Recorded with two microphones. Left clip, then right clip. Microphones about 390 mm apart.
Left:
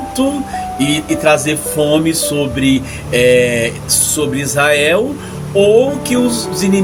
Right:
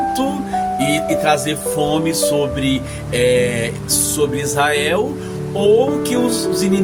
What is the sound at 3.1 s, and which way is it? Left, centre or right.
Speech, right.